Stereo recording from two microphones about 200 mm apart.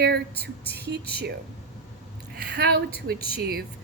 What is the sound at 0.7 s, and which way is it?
Speech, 55° right (ahead or behind).